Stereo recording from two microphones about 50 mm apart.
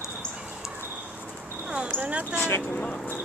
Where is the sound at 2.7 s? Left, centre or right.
Left.